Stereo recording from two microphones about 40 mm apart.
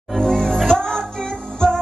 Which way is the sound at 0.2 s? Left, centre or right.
Centre.